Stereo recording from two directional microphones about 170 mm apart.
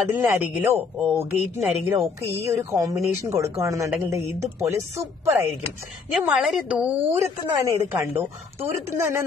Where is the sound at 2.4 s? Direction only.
20° right (ahead or behind).